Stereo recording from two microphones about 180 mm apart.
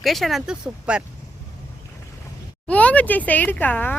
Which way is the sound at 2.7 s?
5° left (ahead or behind).